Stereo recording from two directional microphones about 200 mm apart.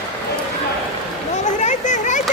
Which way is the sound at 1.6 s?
35° left (ahead or behind).